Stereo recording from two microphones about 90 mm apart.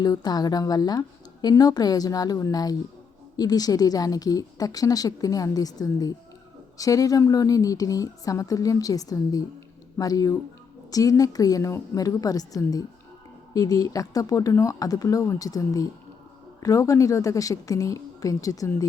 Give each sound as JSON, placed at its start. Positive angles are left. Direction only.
{"t": 0.0, "sound": "a woman's voice", "side_deg": 50}